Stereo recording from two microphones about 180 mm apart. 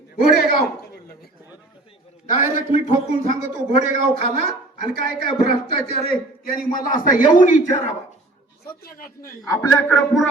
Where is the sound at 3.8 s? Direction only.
45° right (ahead or behind).